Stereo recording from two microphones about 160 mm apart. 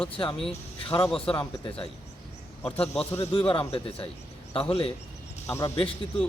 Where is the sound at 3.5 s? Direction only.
35° left (ahead or behind).